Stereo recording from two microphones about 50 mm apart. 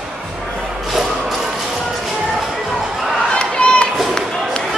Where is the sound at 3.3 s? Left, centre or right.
Left.